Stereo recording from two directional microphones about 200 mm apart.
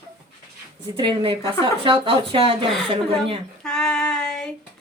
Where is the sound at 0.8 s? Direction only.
25° right (ahead or behind).